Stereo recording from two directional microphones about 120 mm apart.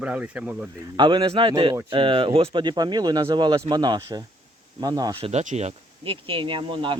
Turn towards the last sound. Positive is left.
turn(degrees=-45)  # may be behind; listen again after turning